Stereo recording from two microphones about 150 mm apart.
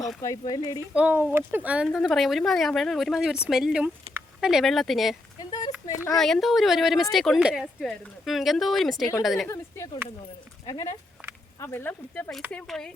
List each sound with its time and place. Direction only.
0.2 s speech: 25° left (ahead or behind)
0.9 s speech: 10° right (ahead or behind)
5.4 s a sound: 25° left (ahead or behind)
6.1 s speech: centre (ahead or behind)
9.5 s speech: 20° left (ahead or behind)
11.6 s speech: 15° left (ahead or behind)